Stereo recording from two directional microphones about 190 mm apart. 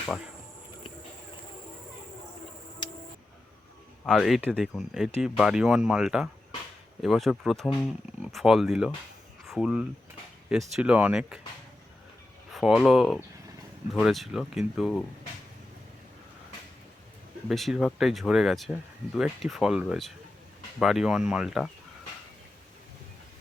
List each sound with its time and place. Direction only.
2.8 s a sound: 25° left (ahead or behind)
4.0 s speech: centre (ahead or behind)
12.5 s speech: centre (ahead or behind)
17.5 s speech: centre (ahead or behind)